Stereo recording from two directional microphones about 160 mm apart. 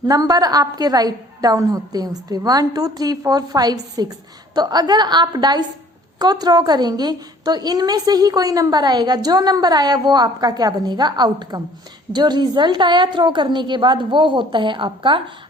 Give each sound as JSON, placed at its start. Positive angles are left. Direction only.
{"t": 0.1, "sound": "a woman's voice", "side_deg": -25}